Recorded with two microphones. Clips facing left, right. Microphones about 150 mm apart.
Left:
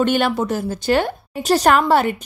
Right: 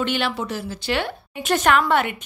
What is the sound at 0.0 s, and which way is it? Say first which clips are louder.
A woman's voice: left 6 dB; 45° left (ahead or behind).